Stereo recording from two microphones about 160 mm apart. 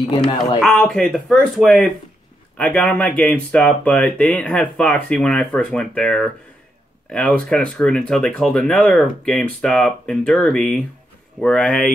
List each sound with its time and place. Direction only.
0.1 s speech: 30° left (ahead or behind)
0.6 s speech: 5° left (ahead or behind)